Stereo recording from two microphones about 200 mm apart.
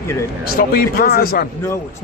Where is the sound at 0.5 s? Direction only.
45° left (ahead or behind).